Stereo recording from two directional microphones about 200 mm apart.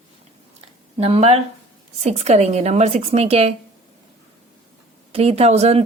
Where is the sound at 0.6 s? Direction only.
30° right (ahead or behind).